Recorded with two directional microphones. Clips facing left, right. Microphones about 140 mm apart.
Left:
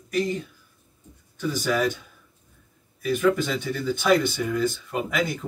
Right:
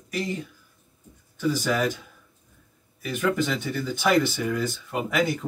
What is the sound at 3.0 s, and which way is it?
Speech, 5° right (ahead or behind).